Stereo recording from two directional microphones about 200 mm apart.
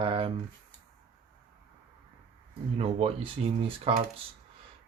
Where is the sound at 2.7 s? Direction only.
30° right (ahead or behind).